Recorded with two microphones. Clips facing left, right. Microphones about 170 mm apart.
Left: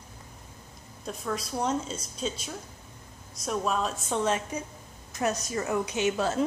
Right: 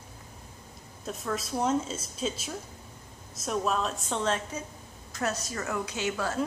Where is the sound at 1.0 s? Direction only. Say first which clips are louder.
Even; centre (ahead or behind).